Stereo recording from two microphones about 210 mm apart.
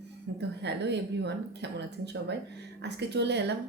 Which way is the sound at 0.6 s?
55° right (ahead or behind).